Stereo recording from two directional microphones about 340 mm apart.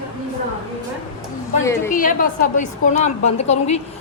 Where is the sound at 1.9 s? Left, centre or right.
Left.